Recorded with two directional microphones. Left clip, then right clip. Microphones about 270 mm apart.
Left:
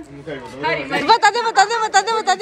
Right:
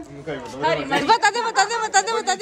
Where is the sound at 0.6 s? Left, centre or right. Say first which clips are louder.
Even; right.